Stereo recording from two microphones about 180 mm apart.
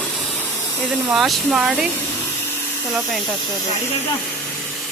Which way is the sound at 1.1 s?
Centre (ahead or behind).